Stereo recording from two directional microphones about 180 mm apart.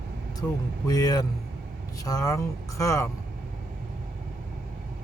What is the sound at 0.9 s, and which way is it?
A man's voice, 20° left (ahead or behind).